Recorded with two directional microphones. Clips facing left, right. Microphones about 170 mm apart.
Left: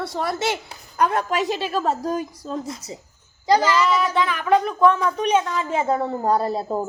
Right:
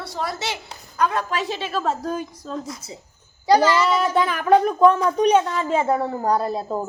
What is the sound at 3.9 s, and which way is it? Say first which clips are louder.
Child singing: right 1 dB; 40° right (ahead or behind).